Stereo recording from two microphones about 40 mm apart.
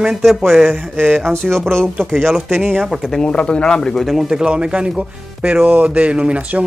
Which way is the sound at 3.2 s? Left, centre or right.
Left.